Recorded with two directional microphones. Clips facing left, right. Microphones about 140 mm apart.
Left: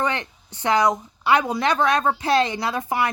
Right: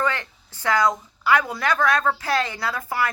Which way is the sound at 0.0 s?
20° left (ahead or behind).